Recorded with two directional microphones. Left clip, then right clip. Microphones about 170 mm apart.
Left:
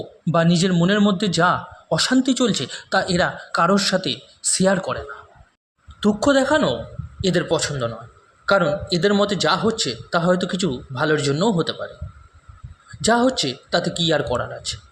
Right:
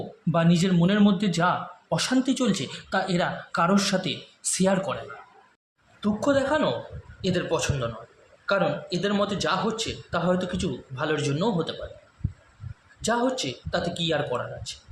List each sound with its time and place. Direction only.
0.3 s speech: 40° left (ahead or behind)
6.0 s speech: 50° left (ahead or behind)
13.1 s speech: 45° left (ahead or behind)